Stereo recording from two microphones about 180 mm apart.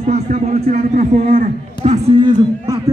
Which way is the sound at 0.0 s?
40° right (ahead or behind).